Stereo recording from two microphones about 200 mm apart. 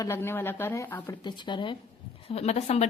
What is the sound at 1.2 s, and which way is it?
Speech, 25° left (ahead or behind).